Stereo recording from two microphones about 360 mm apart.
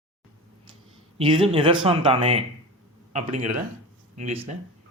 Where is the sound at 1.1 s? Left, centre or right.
Centre.